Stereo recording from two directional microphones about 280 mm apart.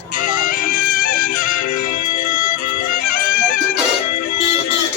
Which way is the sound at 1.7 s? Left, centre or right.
Left.